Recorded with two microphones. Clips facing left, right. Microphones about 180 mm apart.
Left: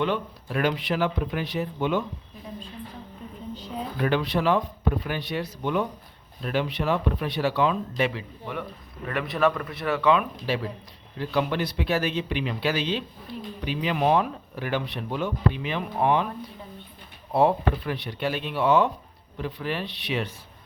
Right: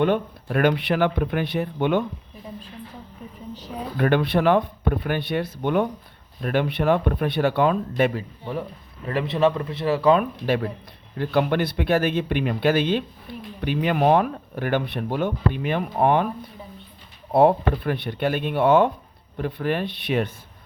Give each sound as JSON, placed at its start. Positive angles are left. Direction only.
{"t": 0.0, "sound": "speech", "side_deg": -55}
{"t": 3.9, "sound": "speech", "side_deg": -55}
{"t": 9.0, "sound": "a man's voice", "side_deg": -25}
{"t": 10.3, "sound": "speech", "side_deg": -55}
{"t": 17.3, "sound": "speech", "side_deg": -55}